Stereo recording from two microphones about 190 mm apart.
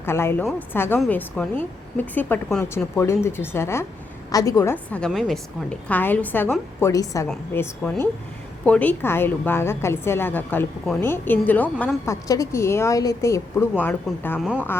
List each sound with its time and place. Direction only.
0.0 s a woman's voice: 15° left (ahead or behind)